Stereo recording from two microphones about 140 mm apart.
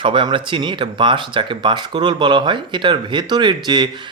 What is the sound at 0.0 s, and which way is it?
Speech, 35° right (ahead or behind).